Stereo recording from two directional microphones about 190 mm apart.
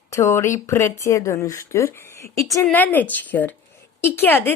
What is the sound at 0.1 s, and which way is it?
Speech, 15° left (ahead or behind).